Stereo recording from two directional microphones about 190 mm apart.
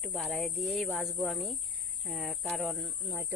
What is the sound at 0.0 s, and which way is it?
Speech, centre (ahead or behind).